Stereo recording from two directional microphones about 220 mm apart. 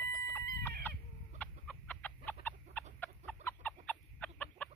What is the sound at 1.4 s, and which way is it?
Chicken, 5° left (ahead or behind).